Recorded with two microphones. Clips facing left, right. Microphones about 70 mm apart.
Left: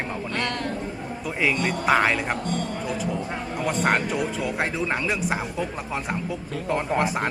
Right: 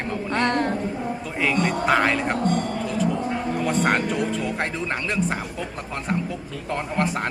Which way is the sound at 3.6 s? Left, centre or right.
Centre.